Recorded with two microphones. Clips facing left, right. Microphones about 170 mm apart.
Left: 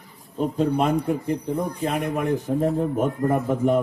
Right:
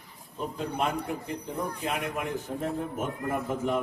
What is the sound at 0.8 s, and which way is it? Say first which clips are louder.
A man's voice: left 8 dB; 40° left (ahead or behind).